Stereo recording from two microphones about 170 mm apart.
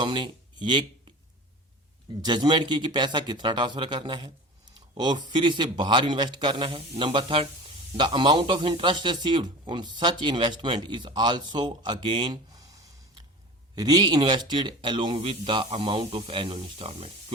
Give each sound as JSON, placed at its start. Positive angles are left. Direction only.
{"t": 0.0, "sound": "speech", "side_deg": -25}
{"t": 2.2, "sound": "speech", "side_deg": -25}